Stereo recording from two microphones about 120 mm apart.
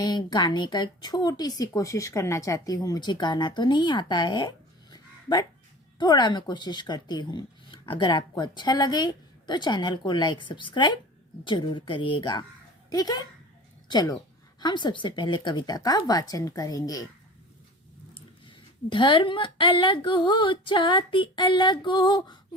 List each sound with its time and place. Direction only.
0.0 s a woman's voice: 35° left (ahead or behind)
18.1 s a woman's voice: 45° left (ahead or behind)